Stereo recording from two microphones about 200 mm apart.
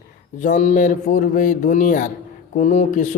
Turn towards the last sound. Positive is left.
turn(degrees=40)  # may be behind; listen again after turning